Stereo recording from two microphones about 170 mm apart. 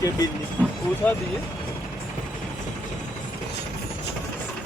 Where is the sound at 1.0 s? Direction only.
10° left (ahead or behind).